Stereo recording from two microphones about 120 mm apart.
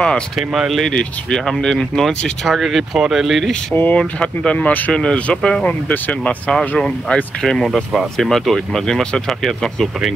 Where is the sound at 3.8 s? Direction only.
15° left (ahead or behind).